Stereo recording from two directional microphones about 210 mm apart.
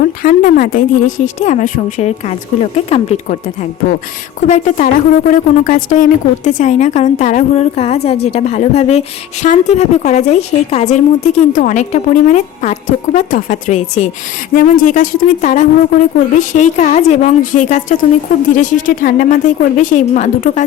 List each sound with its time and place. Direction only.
0.0 s a woman's voice: 40° left (ahead or behind)